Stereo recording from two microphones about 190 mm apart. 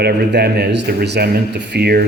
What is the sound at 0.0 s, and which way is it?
A man's voice, 60° right (ahead or behind).